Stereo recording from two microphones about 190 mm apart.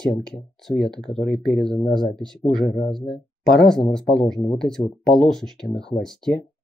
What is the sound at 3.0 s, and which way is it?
Speech, centre (ahead or behind).